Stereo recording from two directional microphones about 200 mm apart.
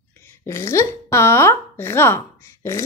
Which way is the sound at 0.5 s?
15° left (ahead or behind).